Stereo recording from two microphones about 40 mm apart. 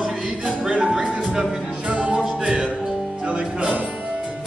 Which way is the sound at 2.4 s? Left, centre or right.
Right.